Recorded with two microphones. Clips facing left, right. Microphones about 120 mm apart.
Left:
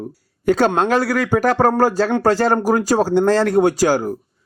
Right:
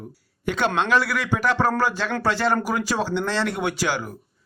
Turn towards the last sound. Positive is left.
turn(degrees=40)  # may be behind; listen again after turning